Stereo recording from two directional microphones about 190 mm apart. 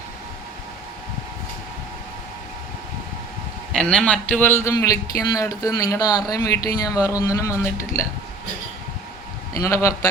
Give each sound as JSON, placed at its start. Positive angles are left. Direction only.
{"t": 3.7, "sound": "a man's voice", "side_deg": 5}
{"t": 9.6, "sound": "a man's voice", "side_deg": 15}